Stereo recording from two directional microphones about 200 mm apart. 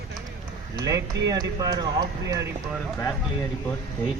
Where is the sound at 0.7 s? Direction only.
20° right (ahead or behind).